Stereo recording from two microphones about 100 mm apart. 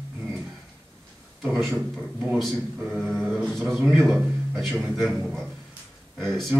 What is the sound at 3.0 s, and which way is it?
A man's voice, 5° left (ahead or behind).